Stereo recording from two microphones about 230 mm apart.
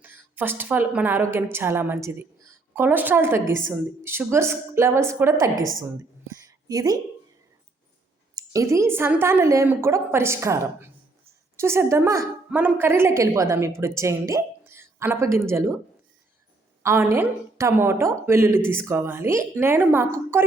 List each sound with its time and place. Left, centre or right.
0.0 s a woman's voice: centre
6.2 s a sound: centre
8.4 s a woman's voice: centre
16.8 s a woman's voice: centre